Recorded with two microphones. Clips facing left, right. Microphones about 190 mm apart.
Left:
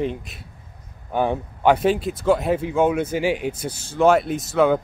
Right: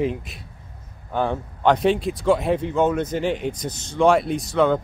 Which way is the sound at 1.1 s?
15° left (ahead or behind).